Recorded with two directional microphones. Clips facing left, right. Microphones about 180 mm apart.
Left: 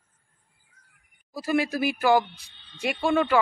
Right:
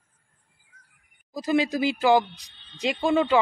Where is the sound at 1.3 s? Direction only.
20° right (ahead or behind).